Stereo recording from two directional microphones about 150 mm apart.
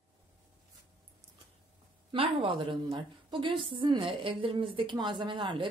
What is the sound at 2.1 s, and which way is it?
A woman's voice, 35° right (ahead or behind).